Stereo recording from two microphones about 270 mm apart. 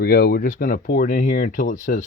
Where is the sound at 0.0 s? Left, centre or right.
Left.